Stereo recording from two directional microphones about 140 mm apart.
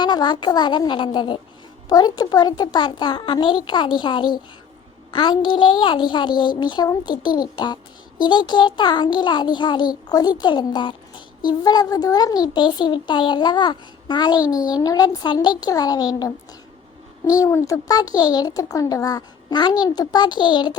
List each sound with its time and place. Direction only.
0.0 s a child's voice: 30° left (ahead or behind)